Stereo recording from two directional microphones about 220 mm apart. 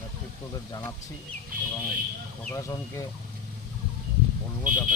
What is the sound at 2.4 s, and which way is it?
Speech, 15° left (ahead or behind).